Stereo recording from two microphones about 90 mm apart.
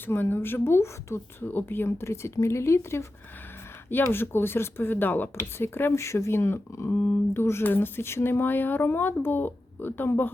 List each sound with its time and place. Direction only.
0.0 s speech: 25° left (ahead or behind)
6.9 s speech: 15° left (ahead or behind)
7.3 s speech: 25° left (ahead or behind)